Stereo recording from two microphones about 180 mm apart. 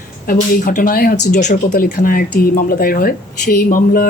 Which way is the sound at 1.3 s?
40° left (ahead or behind).